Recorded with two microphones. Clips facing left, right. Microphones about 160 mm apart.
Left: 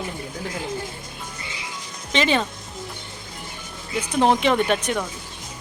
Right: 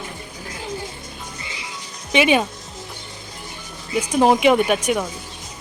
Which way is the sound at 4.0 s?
10° right (ahead or behind).